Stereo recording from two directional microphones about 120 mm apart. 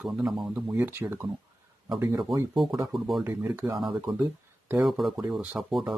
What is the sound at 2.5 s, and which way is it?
Speech, centre (ahead or behind).